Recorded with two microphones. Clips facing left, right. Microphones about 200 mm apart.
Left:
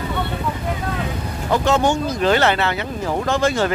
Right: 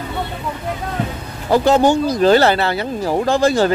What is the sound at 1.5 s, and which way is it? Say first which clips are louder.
Speech: right 5 dB; 35° right (ahead or behind).